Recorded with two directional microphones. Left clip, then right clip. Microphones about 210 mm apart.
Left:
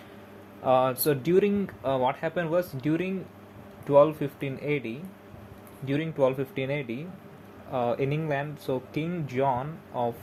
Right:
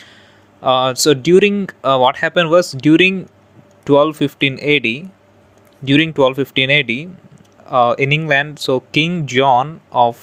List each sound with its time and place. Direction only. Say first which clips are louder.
0.6 s speech: right 10 dB; 35° right (ahead or behind)